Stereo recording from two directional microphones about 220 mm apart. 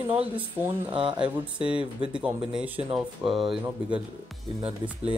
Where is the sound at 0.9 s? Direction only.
25° right (ahead or behind).